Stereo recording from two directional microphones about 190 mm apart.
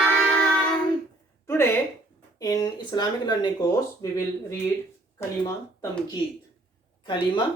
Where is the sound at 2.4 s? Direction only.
20° left (ahead or behind).